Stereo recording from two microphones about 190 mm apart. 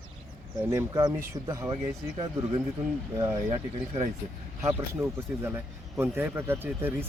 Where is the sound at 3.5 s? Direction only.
35° right (ahead or behind).